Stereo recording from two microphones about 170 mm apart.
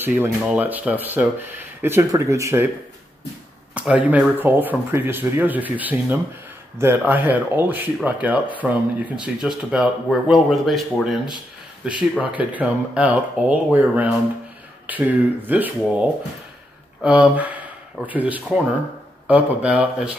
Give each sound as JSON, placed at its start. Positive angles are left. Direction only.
{"t": 0.0, "sound": "speech", "side_deg": -10}
{"t": 3.7, "sound": "speech", "side_deg": -10}